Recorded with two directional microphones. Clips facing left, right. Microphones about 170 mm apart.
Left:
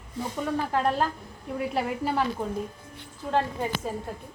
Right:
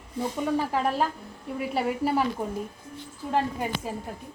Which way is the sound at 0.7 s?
5° right (ahead or behind).